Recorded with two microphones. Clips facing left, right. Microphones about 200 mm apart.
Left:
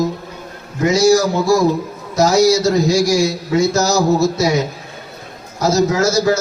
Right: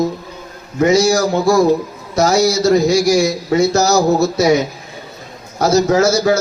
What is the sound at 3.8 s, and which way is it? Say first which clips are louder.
Speech: right 2 dB; 60° right (ahead or behind).